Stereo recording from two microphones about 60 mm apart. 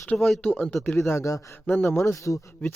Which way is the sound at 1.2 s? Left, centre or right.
Left.